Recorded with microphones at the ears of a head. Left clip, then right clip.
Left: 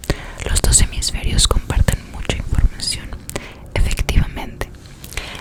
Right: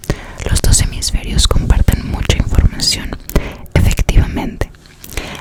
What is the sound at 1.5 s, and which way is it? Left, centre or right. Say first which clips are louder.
Whispering: right 3 dB; right.